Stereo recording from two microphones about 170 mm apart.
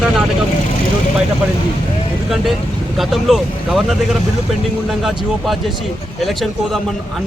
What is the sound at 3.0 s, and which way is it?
Speech, centre (ahead or behind).